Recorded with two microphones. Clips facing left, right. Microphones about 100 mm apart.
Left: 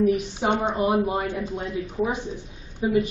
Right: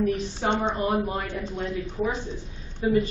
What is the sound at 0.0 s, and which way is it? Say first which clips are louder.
A woman's voice: left 3 dB; 15° left (ahead or behind).